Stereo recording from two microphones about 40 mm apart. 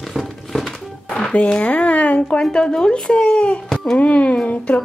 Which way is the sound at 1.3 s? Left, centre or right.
Left.